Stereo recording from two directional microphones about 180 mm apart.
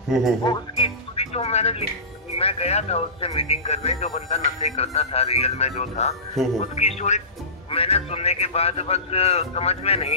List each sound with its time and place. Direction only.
0.4 s music: 25° left (ahead or behind)
2.3 s speech: 35° left (ahead or behind)